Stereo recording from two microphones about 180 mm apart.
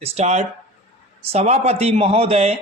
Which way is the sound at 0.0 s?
40° right (ahead or behind).